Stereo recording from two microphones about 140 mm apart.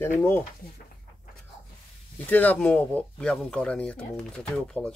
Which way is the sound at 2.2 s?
10° left (ahead or behind).